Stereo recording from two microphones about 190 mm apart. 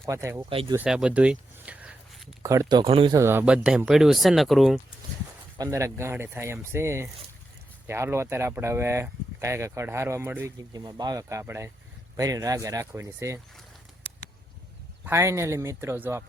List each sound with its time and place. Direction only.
0.0 s speech: 15° right (ahead or behind)
0.5 s speech: 30° right (ahead or behind)
0.8 s a sound: 5° right (ahead or behind)
2.4 s speech: 15° right (ahead or behind)
3.2 s speech: 10° right (ahead or behind)
5.5 s speech: 15° right (ahead or behind)
15.0 s speech: 15° right (ahead or behind)